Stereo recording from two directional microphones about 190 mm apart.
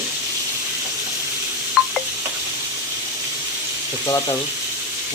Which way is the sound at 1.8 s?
Centre (ahead or behind).